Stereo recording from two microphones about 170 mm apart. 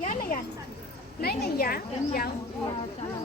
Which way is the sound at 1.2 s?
65° left (ahead or behind).